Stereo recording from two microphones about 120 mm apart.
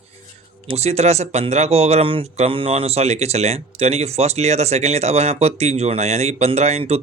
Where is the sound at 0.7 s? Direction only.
60° right (ahead or behind).